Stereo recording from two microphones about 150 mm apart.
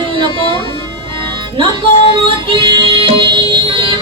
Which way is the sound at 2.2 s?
35° right (ahead or behind).